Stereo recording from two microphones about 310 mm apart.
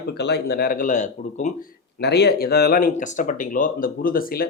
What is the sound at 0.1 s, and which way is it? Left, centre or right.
Speech, left.